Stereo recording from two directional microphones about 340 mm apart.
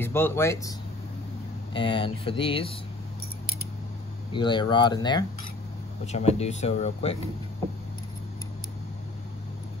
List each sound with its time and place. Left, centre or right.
0.0 s speech: centre
4.3 s speech: centre